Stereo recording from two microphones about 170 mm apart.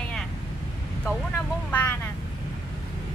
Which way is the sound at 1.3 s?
10° left (ahead or behind).